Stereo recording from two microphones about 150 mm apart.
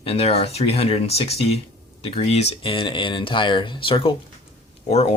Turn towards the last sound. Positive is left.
turn(degrees=45)  # may be behind; listen again after turning